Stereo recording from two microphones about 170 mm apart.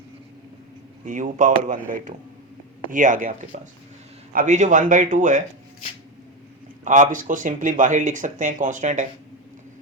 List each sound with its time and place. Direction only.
1.0 s speech: 50° right (ahead or behind)
2.9 s speech: 50° right (ahead or behind)
6.8 s speech: 50° right (ahead or behind)